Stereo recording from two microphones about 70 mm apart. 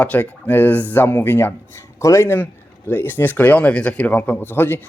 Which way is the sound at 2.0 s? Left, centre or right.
Left.